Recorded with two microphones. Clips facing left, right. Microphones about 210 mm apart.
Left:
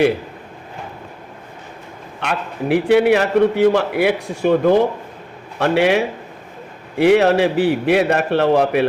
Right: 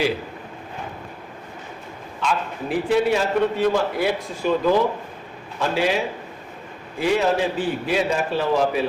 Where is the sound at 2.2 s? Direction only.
65° left (ahead or behind).